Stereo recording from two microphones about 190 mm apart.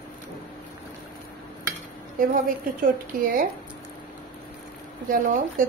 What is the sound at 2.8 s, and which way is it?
Speech, 45° right (ahead or behind).